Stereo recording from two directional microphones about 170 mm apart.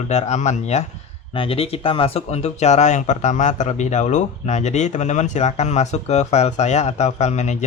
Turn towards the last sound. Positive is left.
turn(degrees=40)  # may be behind; listen again after turning